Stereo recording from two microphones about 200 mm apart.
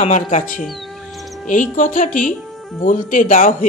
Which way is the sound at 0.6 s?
Centre (ahead or behind).